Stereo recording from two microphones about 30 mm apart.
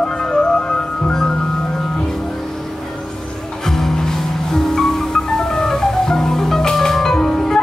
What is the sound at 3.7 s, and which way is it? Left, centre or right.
Music, centre.